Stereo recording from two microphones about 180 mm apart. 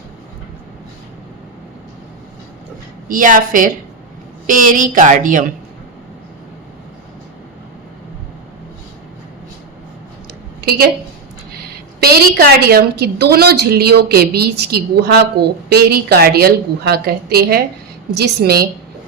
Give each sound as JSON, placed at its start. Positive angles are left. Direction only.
{"t": 3.1, "sound": "speech", "side_deg": -50}
{"t": 10.6, "sound": "a woman's voice", "side_deg": -60}
{"t": 12.0, "sound": "a woman's voice", "side_deg": -60}